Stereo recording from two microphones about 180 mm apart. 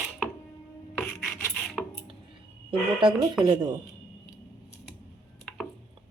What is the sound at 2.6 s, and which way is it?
Speech, 25° right (ahead or behind).